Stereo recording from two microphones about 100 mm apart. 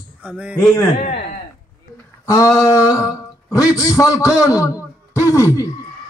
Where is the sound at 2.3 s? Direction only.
35° left (ahead or behind).